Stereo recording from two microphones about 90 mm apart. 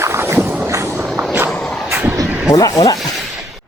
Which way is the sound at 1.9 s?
20° right (ahead or behind).